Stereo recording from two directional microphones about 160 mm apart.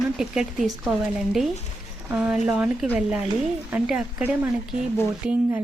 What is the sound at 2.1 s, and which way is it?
Speech, 5° right (ahead or behind).